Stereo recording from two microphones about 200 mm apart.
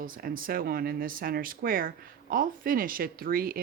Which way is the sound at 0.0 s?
45° right (ahead or behind).